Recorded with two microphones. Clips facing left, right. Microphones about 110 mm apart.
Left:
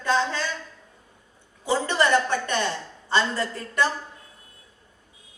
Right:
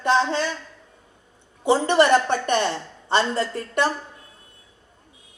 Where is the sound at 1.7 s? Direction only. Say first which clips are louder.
Right 5 dB; 20° right (ahead or behind).